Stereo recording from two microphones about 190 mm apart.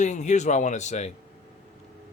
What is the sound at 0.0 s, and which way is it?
Speech, 40° left (ahead or behind).